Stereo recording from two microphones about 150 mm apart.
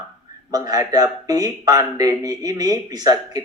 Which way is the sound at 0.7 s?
25° right (ahead or behind).